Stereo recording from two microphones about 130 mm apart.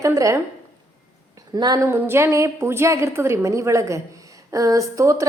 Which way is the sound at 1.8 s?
20° right (ahead or behind).